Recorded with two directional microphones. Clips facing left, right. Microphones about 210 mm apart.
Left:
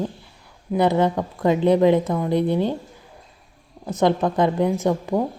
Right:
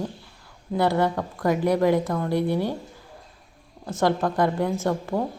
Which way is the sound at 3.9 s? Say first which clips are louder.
Left 3 dB; 20° left (ahead or behind).